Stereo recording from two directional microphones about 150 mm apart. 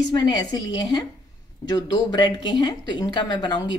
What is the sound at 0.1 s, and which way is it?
Speech, 25° left (ahead or behind).